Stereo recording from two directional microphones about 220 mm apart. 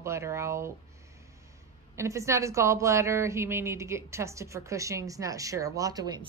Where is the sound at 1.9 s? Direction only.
15° right (ahead or behind).